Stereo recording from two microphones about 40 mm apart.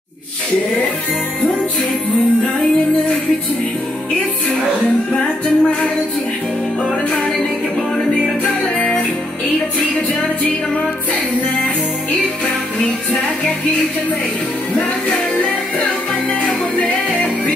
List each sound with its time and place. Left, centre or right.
5.1 s music: left
8.7 s music: left
13.1 s music: left
14.8 s music: left